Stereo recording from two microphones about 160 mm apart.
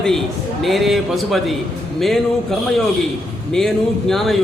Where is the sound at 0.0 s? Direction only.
Centre (ahead or behind).